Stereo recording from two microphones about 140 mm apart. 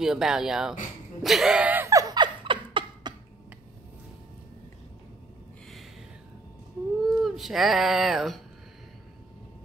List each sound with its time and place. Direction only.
0.0 s speech: 5° right (ahead or behind)
1.9 s laughter: 25° right (ahead or behind)
7.1 s speech: centre (ahead or behind)